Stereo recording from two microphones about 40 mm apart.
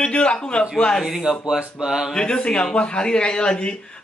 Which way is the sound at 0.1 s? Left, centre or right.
Left.